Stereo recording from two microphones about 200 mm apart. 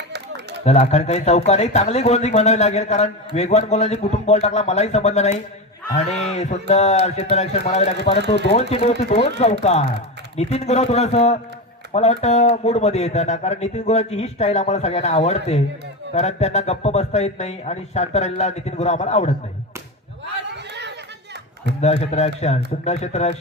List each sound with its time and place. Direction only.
0.6 s speech: 35° left (ahead or behind)
20.3 s a sound: 60° right (ahead or behind)
21.8 s speech: 35° left (ahead or behind)